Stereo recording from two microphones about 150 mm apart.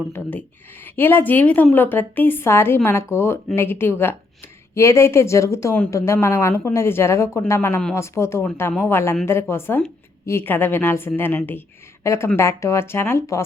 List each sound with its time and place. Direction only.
0.1 s a woman's voice: 10° left (ahead or behind)